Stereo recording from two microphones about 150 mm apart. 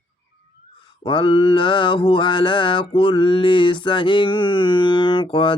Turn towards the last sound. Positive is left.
turn(degrees=35)  # may be behind; listen again after turning